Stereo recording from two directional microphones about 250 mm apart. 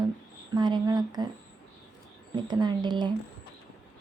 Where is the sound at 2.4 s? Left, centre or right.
Centre.